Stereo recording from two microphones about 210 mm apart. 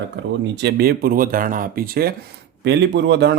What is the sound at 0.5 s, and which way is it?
Speech, 50° right (ahead or behind).